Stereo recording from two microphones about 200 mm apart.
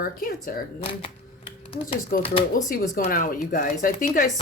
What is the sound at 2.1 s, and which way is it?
A woman's voice, 50° left (ahead or behind).